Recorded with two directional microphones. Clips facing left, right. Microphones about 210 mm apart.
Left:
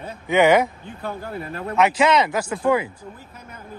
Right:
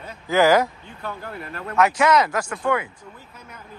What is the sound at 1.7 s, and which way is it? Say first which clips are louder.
Speech: even; 25° left (ahead or behind).